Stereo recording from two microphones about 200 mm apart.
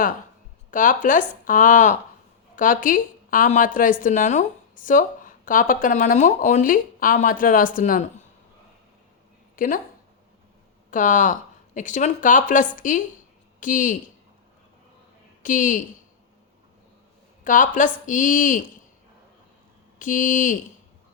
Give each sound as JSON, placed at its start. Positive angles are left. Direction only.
{"t": 0.7, "sound": "a woman's voice", "side_deg": 40}
{"t": 9.6, "sound": "speech", "side_deg": 40}
{"t": 10.9, "sound": "a woman's voice", "side_deg": 40}
{"t": 15.4, "sound": "a woman's voice", "side_deg": 40}
{"t": 17.4, "sound": "a woman's voice", "side_deg": 40}
{"t": 20.0, "sound": "a woman's voice", "side_deg": 40}